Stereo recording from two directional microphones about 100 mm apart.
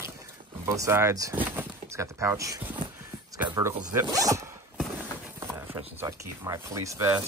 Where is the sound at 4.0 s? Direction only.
35° right (ahead or behind).